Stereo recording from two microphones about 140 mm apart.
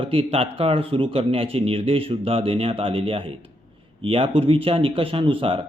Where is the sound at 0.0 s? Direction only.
40° right (ahead or behind).